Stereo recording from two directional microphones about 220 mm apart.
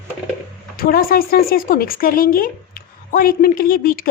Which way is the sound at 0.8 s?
40° left (ahead or behind).